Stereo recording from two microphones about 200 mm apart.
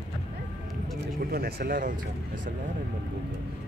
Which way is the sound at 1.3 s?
50° right (ahead or behind).